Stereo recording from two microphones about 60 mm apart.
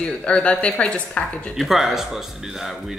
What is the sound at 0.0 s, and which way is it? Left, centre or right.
Speech, centre.